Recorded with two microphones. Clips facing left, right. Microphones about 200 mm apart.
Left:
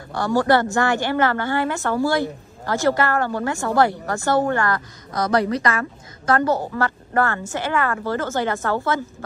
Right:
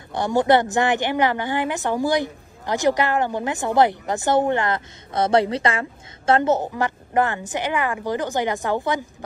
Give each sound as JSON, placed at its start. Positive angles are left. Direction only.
{"t": 0.1, "sound": "speech", "side_deg": -20}